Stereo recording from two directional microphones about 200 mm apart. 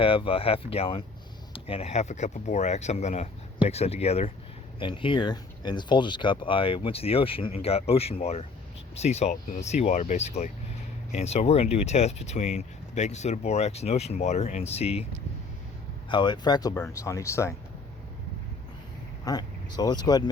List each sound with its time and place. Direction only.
0.0 s speech: 25° left (ahead or behind)
16.0 s speech: 25° left (ahead or behind)
19.2 s speech: 20° left (ahead or behind)